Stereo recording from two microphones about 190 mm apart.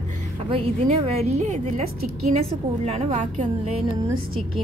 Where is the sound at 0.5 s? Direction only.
35° right (ahead or behind).